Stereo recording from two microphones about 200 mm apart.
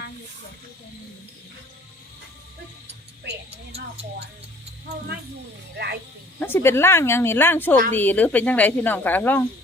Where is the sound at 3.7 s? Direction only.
30° right (ahead or behind).